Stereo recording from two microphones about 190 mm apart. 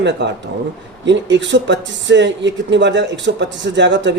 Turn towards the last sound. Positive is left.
turn(degrees=-70)  # may be behind; listen again after turning